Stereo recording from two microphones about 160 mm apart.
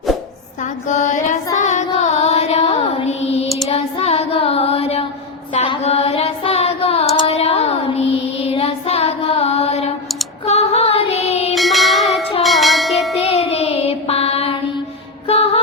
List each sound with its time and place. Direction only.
0.9 s music: 50° left (ahead or behind)
3.7 s child singing: 40° left (ahead or behind)
10.4 s music: 40° left (ahead or behind)
11.5 s music: centre (ahead or behind)
12.4 s a sound: centre (ahead or behind)
13.1 s music: 40° left (ahead or behind)